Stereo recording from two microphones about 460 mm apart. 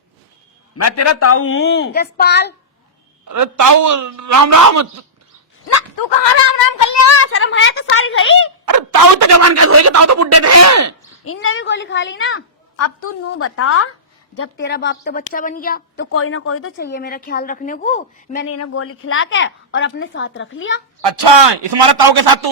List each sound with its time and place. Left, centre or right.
0.8 s a woman's voice: left
3.2 s speech: right
6.1 s speech: left
6.7 s a woman's voice: left
8.6 s speech: right
11.2 s a woman's voice: left
18.4 s a woman's voice: left
21.0 s a man's voice: right